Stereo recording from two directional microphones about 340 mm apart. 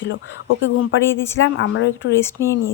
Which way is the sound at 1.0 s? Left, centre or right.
Centre.